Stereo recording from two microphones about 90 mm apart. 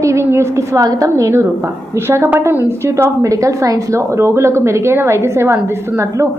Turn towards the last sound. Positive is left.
turn(degrees=-30)  # may be behind; listen again after turning